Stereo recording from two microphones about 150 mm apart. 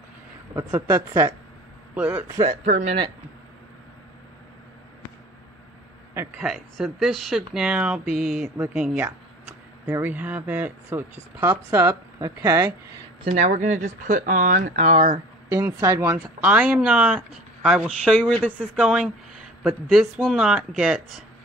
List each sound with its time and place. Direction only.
0.6 s speech: 20° right (ahead or behind)
2.6 s a man's voice: 50° right (ahead or behind)
6.4 s speech: centre (ahead or behind); by 12.6 s 20° right (ahead or behind)
13.2 s speech: 55° right (ahead or behind)
15.5 s speech: 20° right (ahead or behind); by 18.7 s 10° left (ahead or behind)
18.8 s speech: 5° right (ahead or behind)